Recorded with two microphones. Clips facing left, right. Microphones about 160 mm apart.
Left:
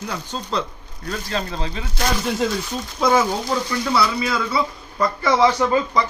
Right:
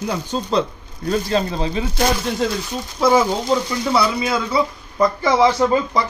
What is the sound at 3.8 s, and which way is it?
Speech, 20° right (ahead or behind).